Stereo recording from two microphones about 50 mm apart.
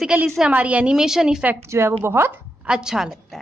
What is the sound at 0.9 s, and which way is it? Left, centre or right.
Speech, centre.